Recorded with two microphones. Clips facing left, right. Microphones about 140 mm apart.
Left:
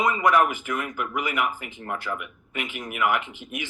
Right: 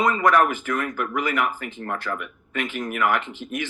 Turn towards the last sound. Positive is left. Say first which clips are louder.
# right 3 dB
turn(degrees=15)  # may be behind; listen again after turning